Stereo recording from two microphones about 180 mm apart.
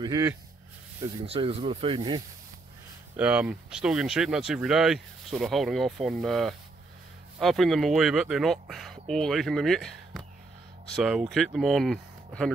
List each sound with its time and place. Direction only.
0.0 s speech: 20° right (ahead or behind)
1.2 s speech: 35° right (ahead or behind)
3.2 s speech: 5° right (ahead or behind)